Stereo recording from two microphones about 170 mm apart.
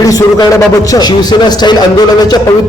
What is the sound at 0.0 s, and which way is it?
A man's voice, 20° left (ahead or behind).